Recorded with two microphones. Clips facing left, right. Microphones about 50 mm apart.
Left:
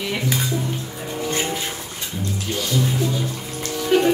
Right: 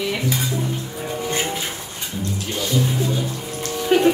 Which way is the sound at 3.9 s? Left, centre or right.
Right.